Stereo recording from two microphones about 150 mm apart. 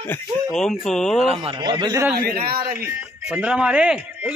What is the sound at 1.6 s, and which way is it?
Speech, 30° right (ahead or behind).